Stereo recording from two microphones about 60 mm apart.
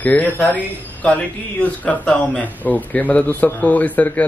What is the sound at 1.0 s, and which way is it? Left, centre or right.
Mantra, centre.